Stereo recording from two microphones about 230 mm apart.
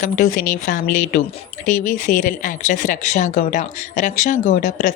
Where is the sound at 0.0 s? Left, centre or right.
Left.